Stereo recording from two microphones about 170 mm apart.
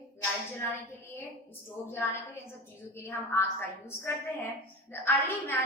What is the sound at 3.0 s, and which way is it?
A woman's voice, 10° left (ahead or behind).